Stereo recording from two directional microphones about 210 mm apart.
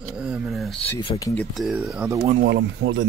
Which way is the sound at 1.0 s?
20° left (ahead or behind).